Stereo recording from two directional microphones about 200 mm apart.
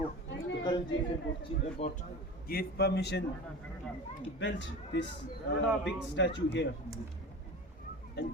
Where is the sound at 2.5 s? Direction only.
50° left (ahead or behind).